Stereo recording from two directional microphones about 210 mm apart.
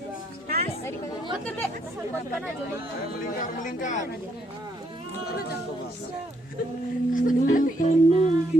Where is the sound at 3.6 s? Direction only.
35° left (ahead or behind).